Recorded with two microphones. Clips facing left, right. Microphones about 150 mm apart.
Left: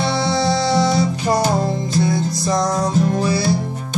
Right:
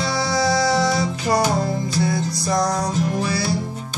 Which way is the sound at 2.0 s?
25° left (ahead or behind).